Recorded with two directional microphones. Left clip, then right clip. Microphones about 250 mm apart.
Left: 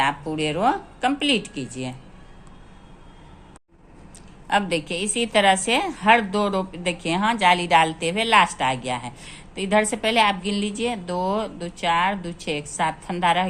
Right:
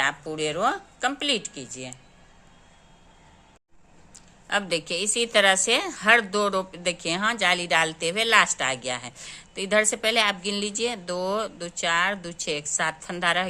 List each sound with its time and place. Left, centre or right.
0.0 s speech: centre
4.4 s a woman's voice: centre